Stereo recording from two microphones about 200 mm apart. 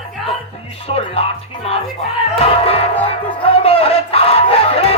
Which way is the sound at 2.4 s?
30° left (ahead or behind).